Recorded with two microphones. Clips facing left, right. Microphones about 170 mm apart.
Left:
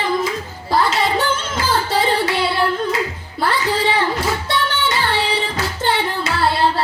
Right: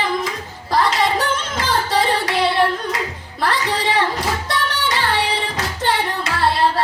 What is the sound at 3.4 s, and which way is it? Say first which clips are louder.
Music: left 2 dB; 30° left (ahead or behind).